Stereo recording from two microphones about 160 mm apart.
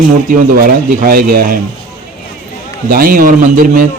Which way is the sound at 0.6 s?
65° right (ahead or behind).